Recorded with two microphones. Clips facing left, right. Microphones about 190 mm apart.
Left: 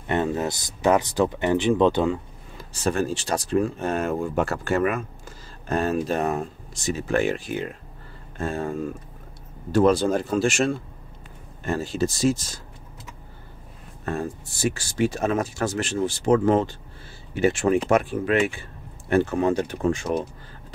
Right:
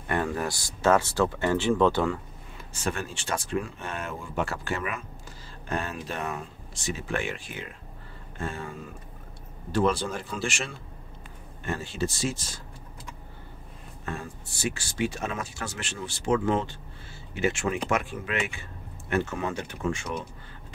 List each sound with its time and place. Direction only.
0.0 s speech: 25° left (ahead or behind)
2.5 s speech: 40° left (ahead or behind)
14.0 s speech: 40° left (ahead or behind)